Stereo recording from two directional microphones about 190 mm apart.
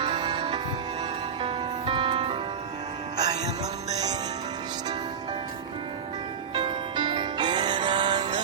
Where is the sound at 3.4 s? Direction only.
35° right (ahead or behind).